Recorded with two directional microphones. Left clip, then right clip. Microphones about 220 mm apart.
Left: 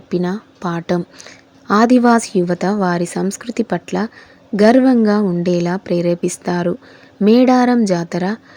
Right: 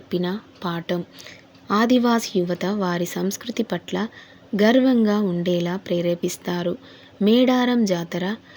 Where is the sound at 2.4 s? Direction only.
Centre (ahead or behind).